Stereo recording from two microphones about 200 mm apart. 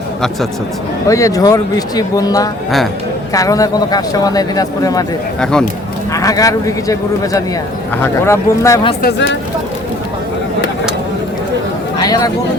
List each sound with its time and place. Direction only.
1.0 s a man's voice: 15° left (ahead or behind)
5.4 s speech: 5° left (ahead or behind)
6.1 s a man's voice: 15° left (ahead or behind)
9.0 s speech: 55° left (ahead or behind)
11.9 s a sound: 20° left (ahead or behind)